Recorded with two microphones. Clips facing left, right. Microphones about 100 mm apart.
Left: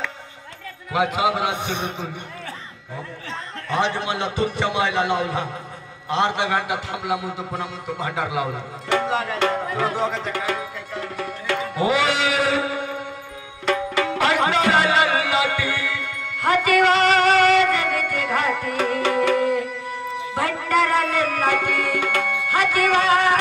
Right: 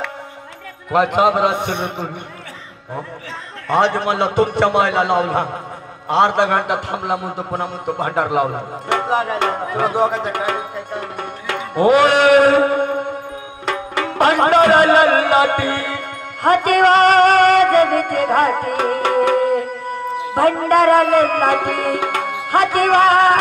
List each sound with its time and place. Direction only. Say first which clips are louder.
0.9 s a man's voice: right 6 dB; 50° right (ahead or behind)
3.6 s a man's voice: right 7 dB; 55° right (ahead or behind)
11.7 s music: right 10 dB; 50° right (ahead or behind)